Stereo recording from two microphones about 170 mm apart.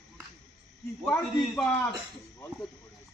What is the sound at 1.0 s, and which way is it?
Speech, 5° left (ahead or behind).